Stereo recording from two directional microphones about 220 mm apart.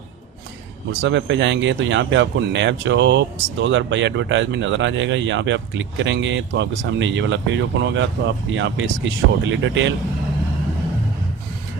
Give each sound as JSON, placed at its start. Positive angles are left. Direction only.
{"t": 1.0, "sound": "speech", "side_deg": -55}